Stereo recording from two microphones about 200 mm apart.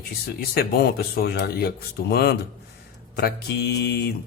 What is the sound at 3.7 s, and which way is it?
Speech, 55° left (ahead or behind).